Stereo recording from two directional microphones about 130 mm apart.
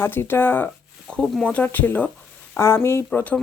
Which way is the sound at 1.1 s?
Centre (ahead or behind).